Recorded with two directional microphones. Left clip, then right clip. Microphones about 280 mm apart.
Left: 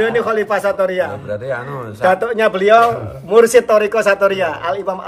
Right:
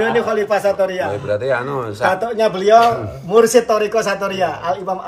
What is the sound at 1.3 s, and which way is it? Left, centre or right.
Speech, right.